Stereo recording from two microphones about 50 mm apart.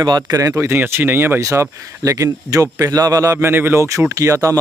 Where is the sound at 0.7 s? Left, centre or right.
Right.